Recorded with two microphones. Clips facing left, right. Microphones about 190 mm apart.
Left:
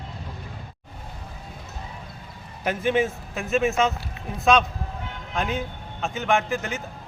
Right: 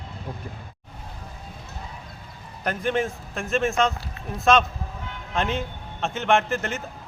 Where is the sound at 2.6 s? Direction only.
5° left (ahead or behind).